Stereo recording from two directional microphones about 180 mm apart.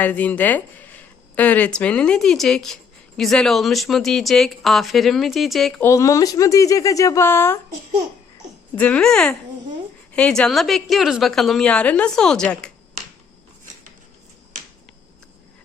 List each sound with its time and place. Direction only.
0.0 s a woman's voice: 10° left (ahead or behind)
5.8 s speech: 15° left (ahead or behind)
8.7 s a woman's voice: 5° left (ahead or behind)